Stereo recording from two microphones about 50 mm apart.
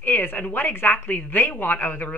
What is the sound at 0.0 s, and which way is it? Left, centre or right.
Speech, left.